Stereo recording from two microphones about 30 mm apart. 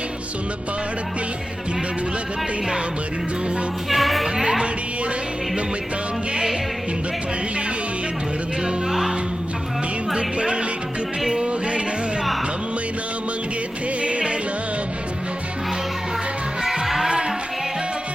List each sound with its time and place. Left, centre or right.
3.8 s speech: centre
4.4 s music: right
6.3 s music: right
8.9 s music: centre
10.2 s speech: right
11.4 s music: right
14.0 s music: right
16.8 s music: centre
17.1 s music: right